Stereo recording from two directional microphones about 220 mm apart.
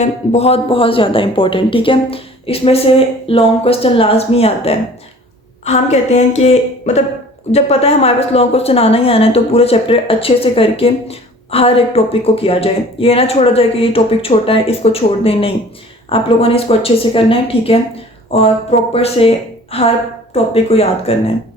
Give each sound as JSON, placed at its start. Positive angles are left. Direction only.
{"t": 0.0, "sound": "a woman's voice", "side_deg": 30}
{"t": 18.9, "sound": "a woman's voice", "side_deg": 25}